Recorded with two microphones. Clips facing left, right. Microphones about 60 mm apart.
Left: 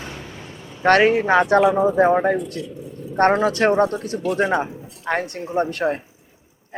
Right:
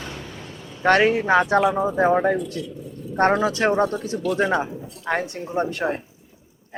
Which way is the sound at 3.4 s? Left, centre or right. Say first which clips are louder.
Left 3 dB; left.